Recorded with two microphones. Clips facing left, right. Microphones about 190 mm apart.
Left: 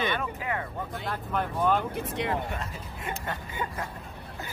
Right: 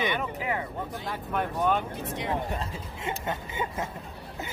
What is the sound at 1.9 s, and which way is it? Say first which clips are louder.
Speech: left 2 dB; 65° left (ahead or behind).